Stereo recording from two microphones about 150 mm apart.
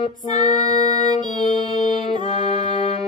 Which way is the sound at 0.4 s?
25° right (ahead or behind).